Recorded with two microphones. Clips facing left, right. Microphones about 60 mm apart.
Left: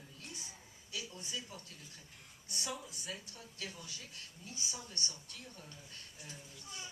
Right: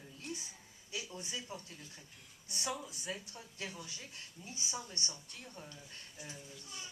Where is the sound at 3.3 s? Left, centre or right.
Right.